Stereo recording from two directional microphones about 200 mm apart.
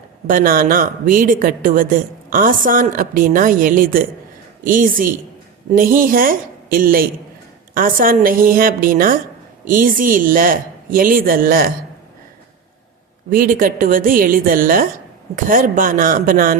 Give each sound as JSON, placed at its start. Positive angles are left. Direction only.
{"t": 0.3, "sound": "speech", "side_deg": -45}
{"t": 13.3, "sound": "speech", "side_deg": -45}